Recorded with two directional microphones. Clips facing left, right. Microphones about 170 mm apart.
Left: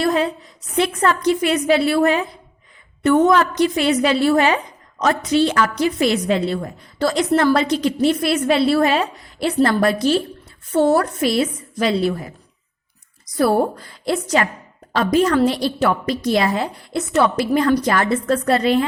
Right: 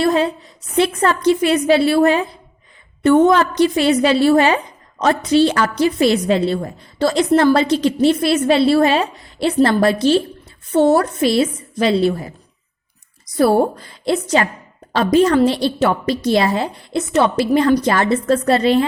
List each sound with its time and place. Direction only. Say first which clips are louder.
0.0 s a sound: right 3 dB; 25° right (ahead or behind)
0.8 s a woman's voice: right 2 dB; 30° right (ahead or behind)
13.3 s a woman's voice: right 3 dB; 30° right (ahead or behind)